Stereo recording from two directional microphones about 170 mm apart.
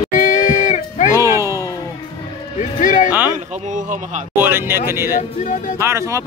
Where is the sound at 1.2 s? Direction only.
20° right (ahead or behind).